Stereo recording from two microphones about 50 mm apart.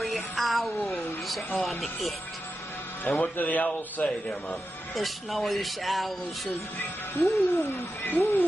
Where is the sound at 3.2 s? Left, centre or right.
Left.